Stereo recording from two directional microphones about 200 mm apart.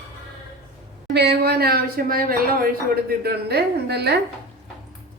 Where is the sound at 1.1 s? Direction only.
55° right (ahead or behind).